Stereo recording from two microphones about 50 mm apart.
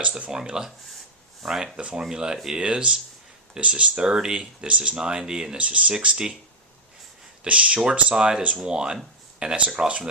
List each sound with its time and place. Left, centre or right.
0.3 s speech: centre
5.5 s speech: right
6.0 s speech: centre
7.4 s speech: right